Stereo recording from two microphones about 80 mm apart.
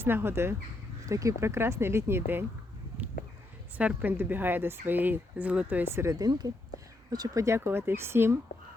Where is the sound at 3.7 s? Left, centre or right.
Centre.